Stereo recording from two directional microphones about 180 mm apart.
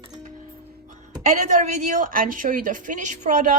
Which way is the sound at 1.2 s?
40° right (ahead or behind).